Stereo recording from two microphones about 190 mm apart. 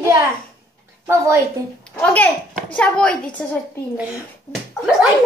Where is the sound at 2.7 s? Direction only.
5° left (ahead or behind).